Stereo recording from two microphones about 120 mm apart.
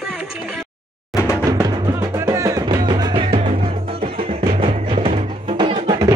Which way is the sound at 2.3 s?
25° right (ahead or behind).